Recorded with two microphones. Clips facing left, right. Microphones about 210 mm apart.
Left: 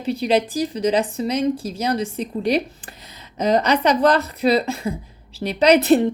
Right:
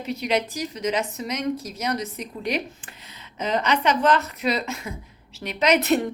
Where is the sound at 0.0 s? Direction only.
30° left (ahead or behind).